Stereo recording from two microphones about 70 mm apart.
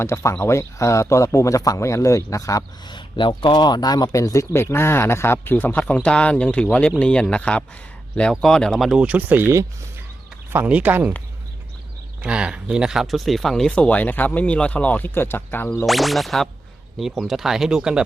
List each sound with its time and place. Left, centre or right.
0.0 s a man's voice: left
3.5 s speech: left
4.2 s speech: left; by 8.8 s centre
9.0 s speech: right
10.5 s speech: right
12.2 s speech: centre
13.7 s speech: centre
15.9 s speech: centre